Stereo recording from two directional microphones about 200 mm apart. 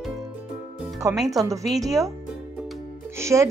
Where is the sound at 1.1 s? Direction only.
Centre (ahead or behind).